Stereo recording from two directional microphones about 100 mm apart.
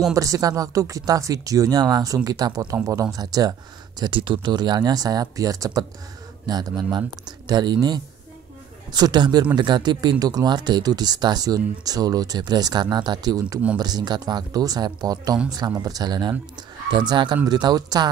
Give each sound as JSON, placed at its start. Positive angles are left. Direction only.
{"t": 0.1, "sound": "speech", "side_deg": -35}
{"t": 4.0, "sound": "speech", "side_deg": -55}